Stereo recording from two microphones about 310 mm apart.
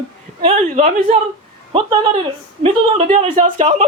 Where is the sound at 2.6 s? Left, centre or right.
Right.